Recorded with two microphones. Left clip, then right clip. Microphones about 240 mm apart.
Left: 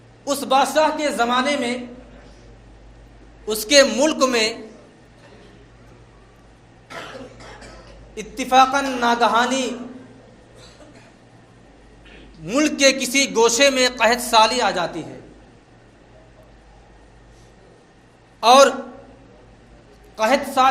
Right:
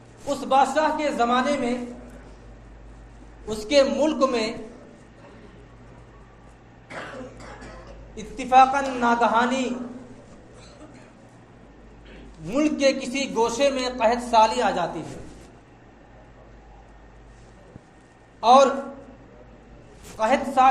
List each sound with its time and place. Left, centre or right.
0.3 s a man's voice: left
3.4 s a man's voice: left
8.1 s a man's voice: left
12.5 s a man's voice: left
18.3 s a man's voice: left
20.1 s a man's voice: left